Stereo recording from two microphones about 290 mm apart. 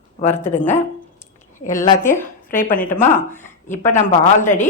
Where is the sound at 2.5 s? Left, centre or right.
Left.